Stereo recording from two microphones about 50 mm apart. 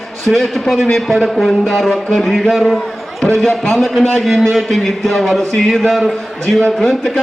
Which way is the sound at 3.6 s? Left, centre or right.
Centre.